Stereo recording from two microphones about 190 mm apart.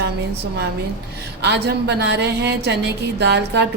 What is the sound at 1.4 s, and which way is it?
A woman's voice, 60° right (ahead or behind).